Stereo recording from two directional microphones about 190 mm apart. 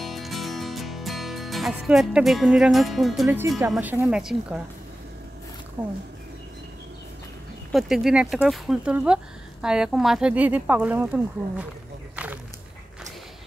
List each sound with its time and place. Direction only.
0.0 s music: centre (ahead or behind)
3.7 s speech: 10° right (ahead or behind)
5.8 s speech: 20° right (ahead or behind)
7.7 s speech: centre (ahead or behind)
12.2 s a sound: 5° right (ahead or behind)